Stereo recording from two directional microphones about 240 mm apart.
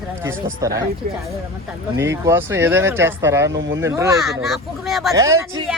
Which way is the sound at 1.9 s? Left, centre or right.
Centre.